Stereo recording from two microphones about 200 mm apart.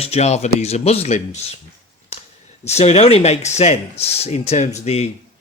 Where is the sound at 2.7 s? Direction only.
30° left (ahead or behind).